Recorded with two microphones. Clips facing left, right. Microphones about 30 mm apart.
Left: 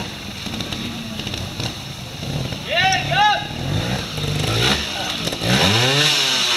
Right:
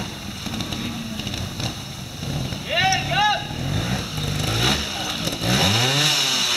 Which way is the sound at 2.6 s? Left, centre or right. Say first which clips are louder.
Left 3 dB; centre.